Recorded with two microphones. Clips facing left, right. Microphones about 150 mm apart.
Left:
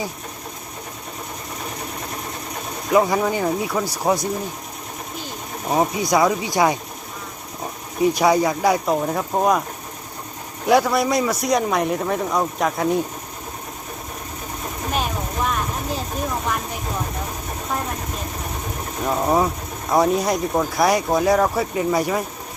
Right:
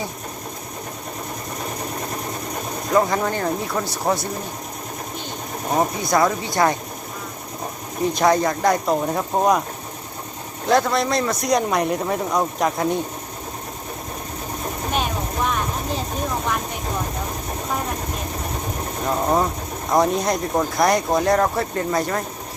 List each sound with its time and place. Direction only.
2.9 s speech: 5° left (ahead or behind)
5.7 s speech: 5° left (ahead or behind)
8.0 s speech: 10° left (ahead or behind)
10.7 s speech: 10° left (ahead or behind)
14.9 s vehicle: centre (ahead or behind)
19.0 s speech: 5° left (ahead or behind)